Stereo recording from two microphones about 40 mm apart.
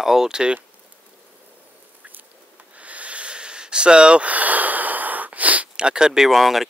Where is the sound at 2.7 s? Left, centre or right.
Right.